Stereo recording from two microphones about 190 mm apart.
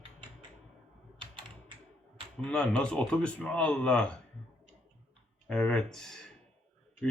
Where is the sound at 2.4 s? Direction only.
5° left (ahead or behind).